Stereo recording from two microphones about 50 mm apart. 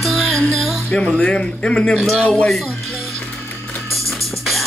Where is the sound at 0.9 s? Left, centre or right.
Centre.